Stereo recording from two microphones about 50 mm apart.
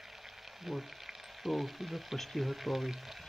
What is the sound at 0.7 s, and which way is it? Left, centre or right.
Frying, centre.